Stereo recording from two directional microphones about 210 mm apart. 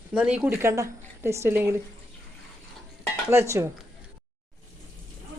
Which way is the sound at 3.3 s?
10° right (ahead or behind).